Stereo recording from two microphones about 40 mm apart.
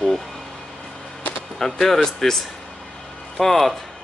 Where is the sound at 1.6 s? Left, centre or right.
Centre.